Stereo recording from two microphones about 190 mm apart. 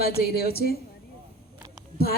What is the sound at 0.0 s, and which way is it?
Speech, 55° left (ahead or behind).